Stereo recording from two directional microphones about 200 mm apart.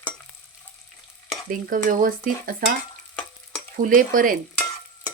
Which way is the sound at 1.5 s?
40° right (ahead or behind).